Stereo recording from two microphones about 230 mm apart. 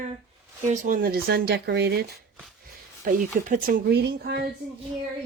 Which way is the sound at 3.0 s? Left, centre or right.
Right.